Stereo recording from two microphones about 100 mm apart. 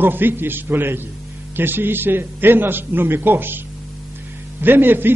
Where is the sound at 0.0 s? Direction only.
20° right (ahead or behind).